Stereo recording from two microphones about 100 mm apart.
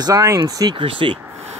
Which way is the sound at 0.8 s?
60° right (ahead or behind).